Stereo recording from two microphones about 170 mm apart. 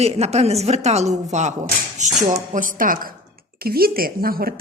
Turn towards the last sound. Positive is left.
turn(degrees=-60)  # may be behind; listen again after turning